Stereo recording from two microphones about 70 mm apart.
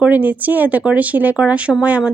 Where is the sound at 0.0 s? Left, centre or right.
Right.